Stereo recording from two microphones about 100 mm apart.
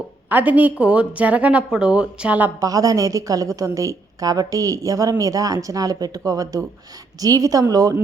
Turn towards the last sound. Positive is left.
turn(degrees=-35)  # may be behind; listen again after turning